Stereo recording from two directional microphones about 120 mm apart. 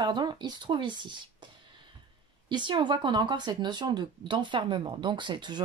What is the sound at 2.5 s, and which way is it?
Speech, 40° right (ahead or behind).